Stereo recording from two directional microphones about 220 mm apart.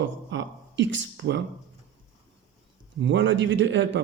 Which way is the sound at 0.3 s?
55° right (ahead or behind).